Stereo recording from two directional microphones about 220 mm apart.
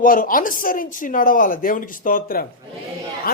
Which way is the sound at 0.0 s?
40° left (ahead or behind).